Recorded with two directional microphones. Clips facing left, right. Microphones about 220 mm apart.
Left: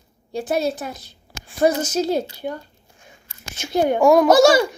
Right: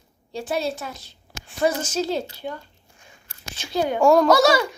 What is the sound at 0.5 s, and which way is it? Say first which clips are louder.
Speech: left 4 dB; 40° left (ahead or behind).